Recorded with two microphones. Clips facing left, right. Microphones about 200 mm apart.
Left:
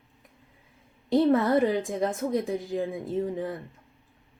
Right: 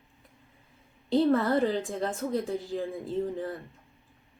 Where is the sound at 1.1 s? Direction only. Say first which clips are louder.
Left 2 dB; 15° left (ahead or behind).